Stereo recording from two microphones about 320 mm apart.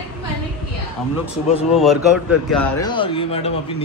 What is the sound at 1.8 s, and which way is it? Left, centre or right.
A man's voice, centre.